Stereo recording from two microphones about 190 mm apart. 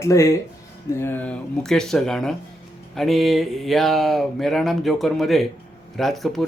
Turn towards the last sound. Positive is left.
turn(degrees=0)  # may be behind; listen again after turning